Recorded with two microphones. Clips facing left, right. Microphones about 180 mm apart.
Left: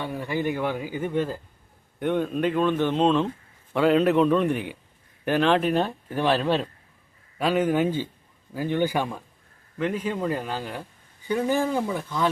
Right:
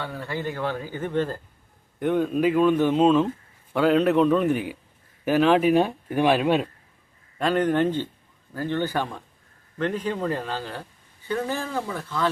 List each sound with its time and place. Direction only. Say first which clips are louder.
0.0 s speech: left 3 dB; 15° left (ahead or behind); by 6.7 s 10° right (ahead or behind)
7.3 s speech: right 1 dB; 5° left (ahead or behind)